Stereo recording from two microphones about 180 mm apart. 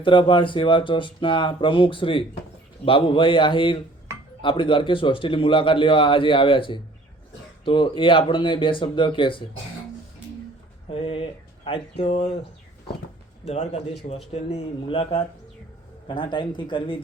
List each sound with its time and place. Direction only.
0.0 s a man's voice: 30° left (ahead or behind)
10.8 s speech: 30° left (ahead or behind)
13.4 s a man's voice: 35° left (ahead or behind)